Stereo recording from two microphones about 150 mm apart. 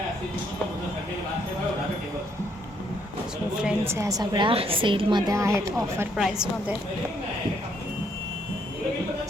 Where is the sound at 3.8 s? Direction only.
20° right (ahead or behind).